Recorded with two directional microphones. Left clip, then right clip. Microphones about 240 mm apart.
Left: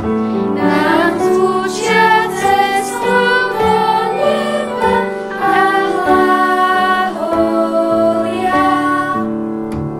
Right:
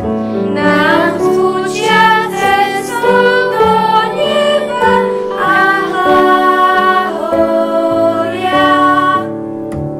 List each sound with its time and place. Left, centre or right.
0.7 s music: centre
6.3 s music: centre